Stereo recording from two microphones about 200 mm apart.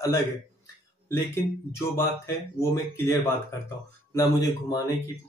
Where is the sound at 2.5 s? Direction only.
15° left (ahead or behind).